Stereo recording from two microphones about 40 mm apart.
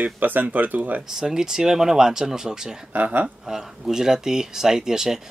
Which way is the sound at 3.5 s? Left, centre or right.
Centre.